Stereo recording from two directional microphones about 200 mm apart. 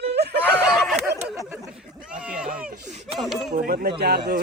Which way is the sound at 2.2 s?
5° right (ahead or behind).